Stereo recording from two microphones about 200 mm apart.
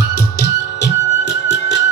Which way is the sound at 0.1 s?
55° left (ahead or behind).